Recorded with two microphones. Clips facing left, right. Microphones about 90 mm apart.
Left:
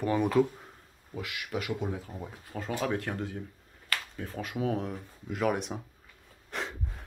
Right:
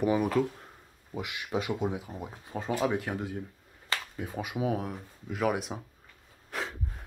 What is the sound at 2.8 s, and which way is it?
Speech, 5° right (ahead or behind).